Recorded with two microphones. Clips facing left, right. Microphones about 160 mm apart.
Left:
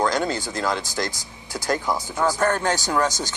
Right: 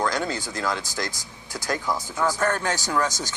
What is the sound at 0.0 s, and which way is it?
A woman's voice, 30° left (ahead or behind).